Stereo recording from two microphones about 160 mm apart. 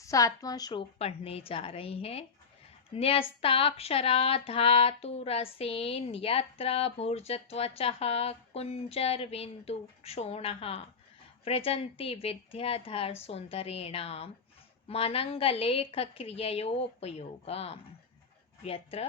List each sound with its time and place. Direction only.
0.0 s speech: 20° left (ahead or behind); by 19.0 s 40° left (ahead or behind)